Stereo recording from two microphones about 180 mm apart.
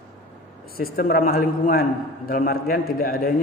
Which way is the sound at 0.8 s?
55° left (ahead or behind).